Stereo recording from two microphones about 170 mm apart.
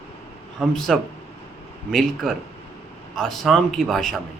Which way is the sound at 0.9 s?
Centre (ahead or behind).